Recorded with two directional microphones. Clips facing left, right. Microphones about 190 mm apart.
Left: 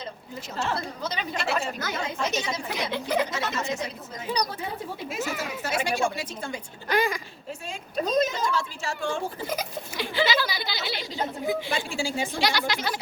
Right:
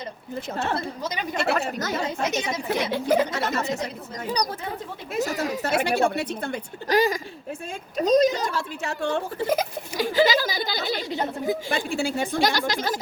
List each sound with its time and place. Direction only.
0.5 s speech: 55° right (ahead or behind)
1.0 s speech: 15° right (ahead or behind)
1.5 s speech: 60° right (ahead or behind)
1.8 s a woman's voice: 35° right (ahead or behind)
2.6 s speech: 50° right (ahead or behind)
5.2 s a woman's voice: 35° right (ahead or behind)
5.6 s speech: 60° right (ahead or behind)
6.8 s a woman's voice: 40° right (ahead or behind)
8.5 s a child's voice: 60° right (ahead or behind); by 13.0 s 40° right (ahead or behind)